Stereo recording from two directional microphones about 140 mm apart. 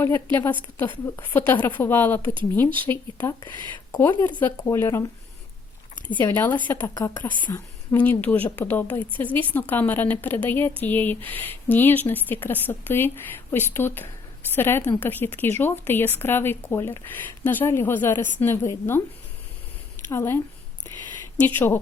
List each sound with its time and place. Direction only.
0.0 s a woman's voice: 15° left (ahead or behind)
6.1 s a woman's voice: 15° left (ahead or behind)
20.1 s a woman's voice: 15° left (ahead or behind)